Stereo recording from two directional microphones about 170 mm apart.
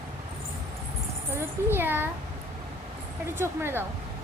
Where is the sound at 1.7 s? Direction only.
10° right (ahead or behind).